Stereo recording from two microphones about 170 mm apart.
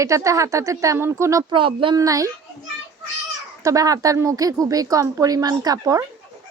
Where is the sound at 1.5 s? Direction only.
30° right (ahead or behind).